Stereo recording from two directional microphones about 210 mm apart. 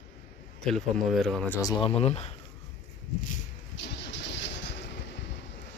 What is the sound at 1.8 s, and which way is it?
Speech, 30° left (ahead or behind).